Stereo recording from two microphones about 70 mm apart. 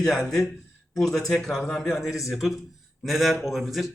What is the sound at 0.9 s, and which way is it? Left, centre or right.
A man's voice, centre.